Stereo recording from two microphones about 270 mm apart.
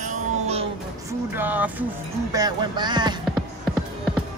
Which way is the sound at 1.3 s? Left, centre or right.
Centre.